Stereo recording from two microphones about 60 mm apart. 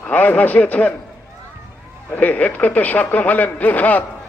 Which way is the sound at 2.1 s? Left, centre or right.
Left.